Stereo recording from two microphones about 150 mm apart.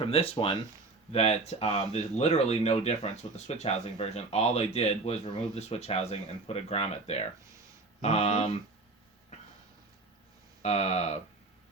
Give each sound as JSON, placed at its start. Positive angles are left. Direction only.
{"t": 0.0, "sound": "speech", "side_deg": 35}
{"t": 10.6, "sound": "speech", "side_deg": 45}